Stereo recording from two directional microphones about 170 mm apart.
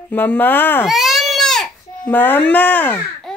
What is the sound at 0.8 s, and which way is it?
Baby cry, centre (ahead or behind).